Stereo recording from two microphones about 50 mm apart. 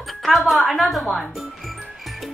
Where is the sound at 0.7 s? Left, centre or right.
Centre.